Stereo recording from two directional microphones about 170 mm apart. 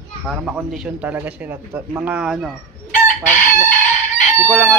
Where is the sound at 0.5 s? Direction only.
5° right (ahead or behind).